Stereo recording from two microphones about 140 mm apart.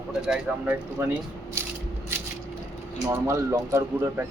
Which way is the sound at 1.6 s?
20° right (ahead or behind).